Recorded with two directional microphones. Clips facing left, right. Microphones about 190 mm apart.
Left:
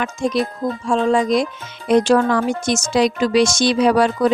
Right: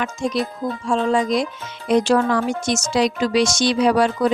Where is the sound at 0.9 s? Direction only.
50° left (ahead or behind).